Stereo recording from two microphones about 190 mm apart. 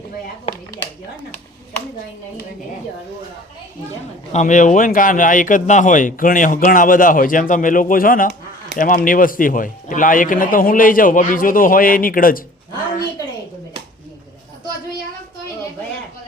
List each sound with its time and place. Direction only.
4.3 s speech: 40° left (ahead or behind)